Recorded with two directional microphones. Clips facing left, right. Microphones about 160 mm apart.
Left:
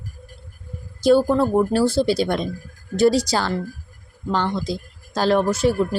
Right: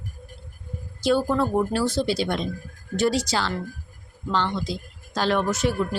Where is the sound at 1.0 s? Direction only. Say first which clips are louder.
Left 6 dB; 40° left (ahead or behind).